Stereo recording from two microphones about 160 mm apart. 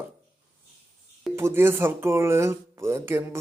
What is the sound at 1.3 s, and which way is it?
Speech, 15° right (ahead or behind).